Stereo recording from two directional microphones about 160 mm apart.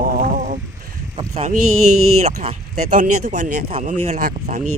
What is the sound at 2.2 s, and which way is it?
Speech, 45° right (ahead or behind).